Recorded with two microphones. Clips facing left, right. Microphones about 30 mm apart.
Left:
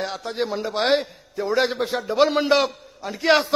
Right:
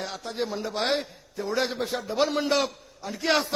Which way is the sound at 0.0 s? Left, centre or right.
Left.